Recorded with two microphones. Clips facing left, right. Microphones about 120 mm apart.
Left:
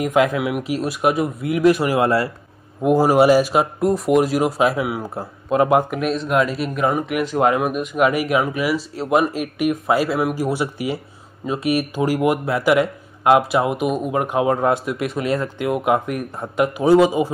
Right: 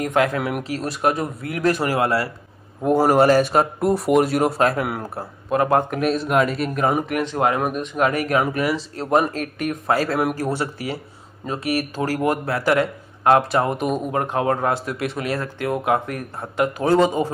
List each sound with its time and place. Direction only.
0.0 s speech: 15° left (ahead or behind)
2.0 s speech: 25° left (ahead or behind)
2.8 s speech: 5° left (ahead or behind)
5.5 s speech: 15° left (ahead or behind)
5.9 s speech: centre (ahead or behind)
14.1 s speech: 15° left (ahead or behind)